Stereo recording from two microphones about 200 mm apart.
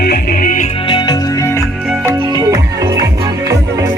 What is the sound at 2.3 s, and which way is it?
Music, 20° right (ahead or behind).